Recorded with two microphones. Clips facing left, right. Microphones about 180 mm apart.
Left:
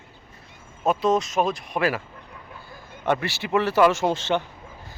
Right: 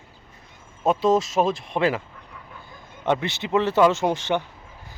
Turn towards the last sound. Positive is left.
turn(degrees=-15)  # may be behind; listen again after turning